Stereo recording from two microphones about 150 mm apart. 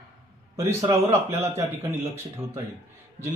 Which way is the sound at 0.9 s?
20° right (ahead or behind).